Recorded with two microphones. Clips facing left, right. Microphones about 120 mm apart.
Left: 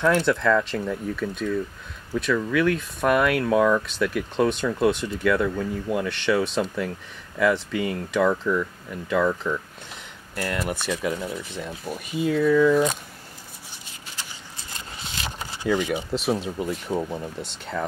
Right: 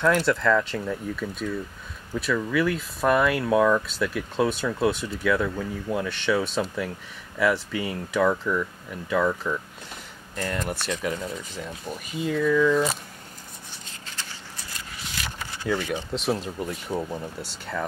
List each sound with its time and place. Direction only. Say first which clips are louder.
0.1 s speech: left 1 dB; centre (ahead or behind)
14.7 s a sound: left 2 dB; 25° left (ahead or behind)
16.1 s speech: left 2 dB; centre (ahead or behind)